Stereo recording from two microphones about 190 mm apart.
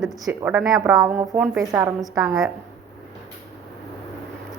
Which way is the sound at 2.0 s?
Centre (ahead or behind).